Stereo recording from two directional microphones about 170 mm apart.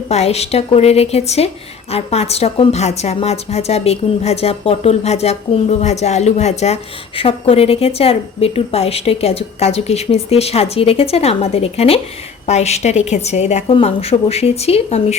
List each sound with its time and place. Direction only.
0.1 s a woman's voice: 40° left (ahead or behind)